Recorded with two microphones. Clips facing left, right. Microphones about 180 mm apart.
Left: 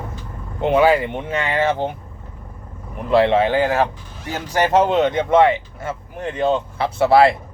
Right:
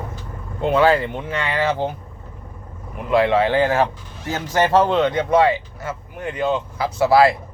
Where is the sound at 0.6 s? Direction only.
15° left (ahead or behind).